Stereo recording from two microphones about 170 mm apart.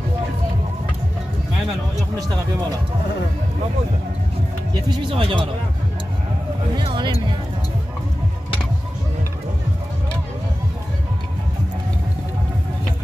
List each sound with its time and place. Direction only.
4.8 s speech: 25° right (ahead or behind)
6.8 s speech: 30° right (ahead or behind)